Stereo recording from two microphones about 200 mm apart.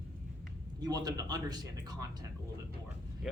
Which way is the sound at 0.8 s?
20° right (ahead or behind).